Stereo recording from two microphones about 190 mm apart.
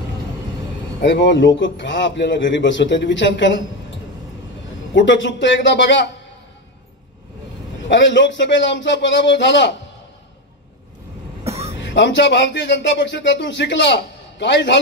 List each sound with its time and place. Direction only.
1.0 s a man's voice: 70° left (ahead or behind)
4.9 s a man's voice: 75° left (ahead or behind)
7.9 s a man's voice: 70° left (ahead or behind)
11.4 s cough: 35° right (ahead or behind)
11.8 s a man's voice: 70° left (ahead or behind)